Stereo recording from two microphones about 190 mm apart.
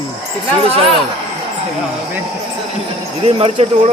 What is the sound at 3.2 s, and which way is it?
Speech, 35° right (ahead or behind).